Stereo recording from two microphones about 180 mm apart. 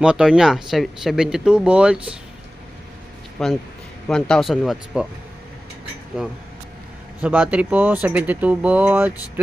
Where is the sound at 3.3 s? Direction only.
Centre (ahead or behind).